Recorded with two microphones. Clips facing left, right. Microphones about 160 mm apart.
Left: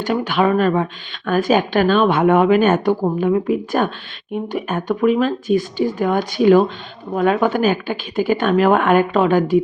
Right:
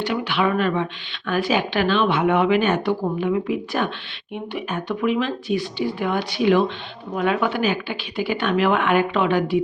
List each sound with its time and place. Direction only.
0.0 s a woman's voice: 45° left (ahead or behind)